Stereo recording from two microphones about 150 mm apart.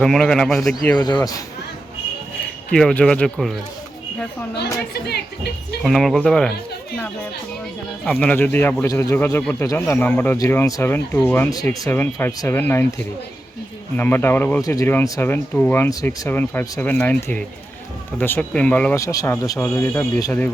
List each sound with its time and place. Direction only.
0.0 s speech: 5° left (ahead or behind)
0.9 s speech: 30° left (ahead or behind)
2.7 s speech: 5° left (ahead or behind)
4.5 s speech: 90° left
5.8 s speech: centre (ahead or behind)
8.0 s speech: 10° left (ahead or behind)
13.9 s speech: 15° left (ahead or behind)
18.9 s speech: 20° left (ahead or behind)
19.5 s speech: 10° left (ahead or behind)